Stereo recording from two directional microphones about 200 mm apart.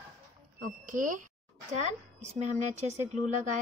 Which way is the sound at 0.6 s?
40° right (ahead or behind).